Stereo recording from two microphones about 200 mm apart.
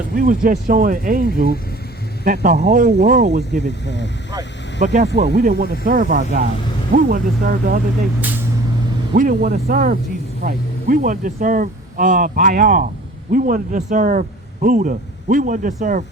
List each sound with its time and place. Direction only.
0.2 s speech: 45° right (ahead or behind)
3.8 s speech: 60° left (ahead or behind)
4.8 s a man's voice: 40° right (ahead or behind)
5.1 s speech: 55° right (ahead or behind)
9.1 s a man's voice: 45° right (ahead or behind)